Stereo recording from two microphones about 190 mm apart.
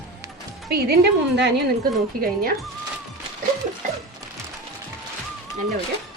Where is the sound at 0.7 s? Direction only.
55° right (ahead or behind).